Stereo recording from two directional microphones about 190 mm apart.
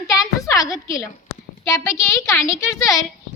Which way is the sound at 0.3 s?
15° left (ahead or behind).